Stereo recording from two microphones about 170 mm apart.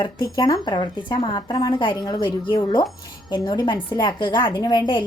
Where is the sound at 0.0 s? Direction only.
25° left (ahead or behind).